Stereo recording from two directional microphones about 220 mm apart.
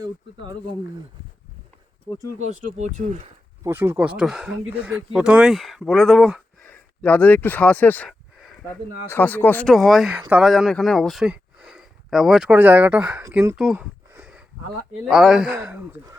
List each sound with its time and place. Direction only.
2.5 s speech: 30° right (ahead or behind)
3.6 s speech: 10° right (ahead or behind)
13.7 s a sound: 10° right (ahead or behind)
15.0 s speech: centre (ahead or behind)